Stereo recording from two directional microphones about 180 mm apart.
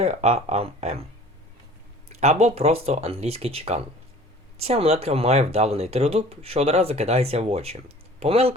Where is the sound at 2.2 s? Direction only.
40° right (ahead or behind).